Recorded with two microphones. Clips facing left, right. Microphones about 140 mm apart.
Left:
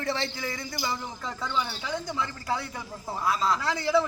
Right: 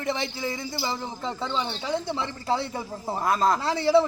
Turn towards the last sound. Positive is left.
turn(degrees=-30)  # may be behind; listen again after turning